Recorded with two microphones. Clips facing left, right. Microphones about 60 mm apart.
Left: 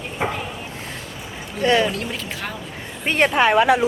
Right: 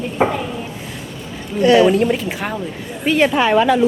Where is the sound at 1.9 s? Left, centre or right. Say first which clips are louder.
Right 11 dB; centre.